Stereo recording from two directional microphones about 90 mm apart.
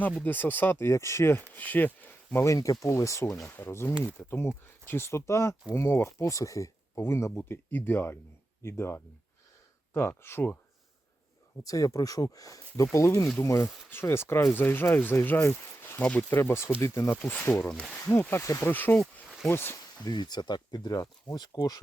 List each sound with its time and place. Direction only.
0.2 s speech: 20° left (ahead or behind)
2.5 s speech: 35° left (ahead or behind)
11.6 s speech: 40° left (ahead or behind); by 16.4 s 15° left (ahead or behind)
16.4 s speech: 30° left (ahead or behind)
17.2 s speech: 20° left (ahead or behind)
18.2 s speech: 25° left (ahead or behind)
18.9 s a sound: centre (ahead or behind)
19.5 s speech: 25° left (ahead or behind)
20.0 s speech: 50° left (ahead or behind)